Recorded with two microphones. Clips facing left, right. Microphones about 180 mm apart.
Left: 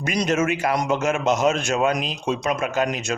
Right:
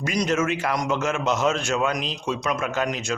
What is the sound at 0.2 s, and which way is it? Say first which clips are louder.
Speech: left 2 dB; 20° left (ahead or behind).